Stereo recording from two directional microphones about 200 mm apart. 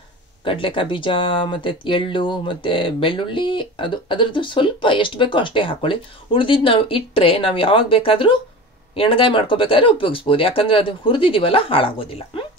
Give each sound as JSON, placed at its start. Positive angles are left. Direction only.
{"t": 0.5, "sound": "speech", "side_deg": 25}